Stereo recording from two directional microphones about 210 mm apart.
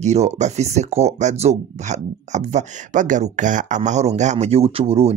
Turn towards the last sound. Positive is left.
turn(degrees=-25)  # may be behind; listen again after turning